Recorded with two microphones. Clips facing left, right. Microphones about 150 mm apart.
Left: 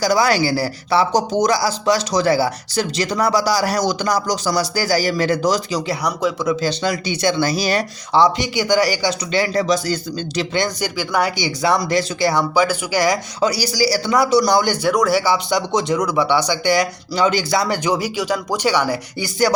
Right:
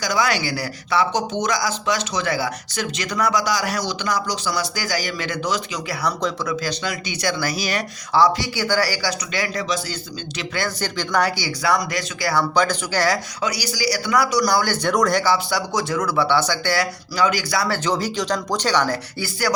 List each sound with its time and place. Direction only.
0.0 s speech: 35° left (ahead or behind)
6.5 s speech: 25° left (ahead or behind)
10.5 s speech: 15° left (ahead or behind)
12.5 s speech: 10° left (ahead or behind)
13.4 s speech: 35° left (ahead or behind)
14.8 s speech: 5° left (ahead or behind)